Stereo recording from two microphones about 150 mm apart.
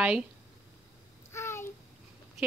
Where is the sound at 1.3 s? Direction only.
15° left (ahead or behind).